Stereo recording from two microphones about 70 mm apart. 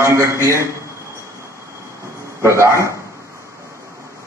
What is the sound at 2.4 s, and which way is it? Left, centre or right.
Speech, right.